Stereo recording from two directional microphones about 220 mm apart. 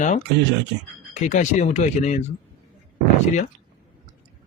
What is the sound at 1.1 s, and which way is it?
Speech, 35° left (ahead or behind).